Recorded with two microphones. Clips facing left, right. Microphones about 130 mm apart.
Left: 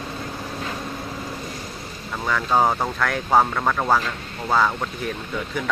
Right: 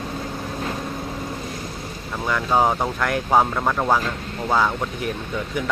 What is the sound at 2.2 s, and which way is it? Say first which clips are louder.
Speech: even; 5° right (ahead or behind).